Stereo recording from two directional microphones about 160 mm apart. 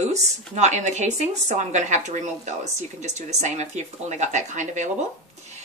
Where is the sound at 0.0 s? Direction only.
45° right (ahead or behind).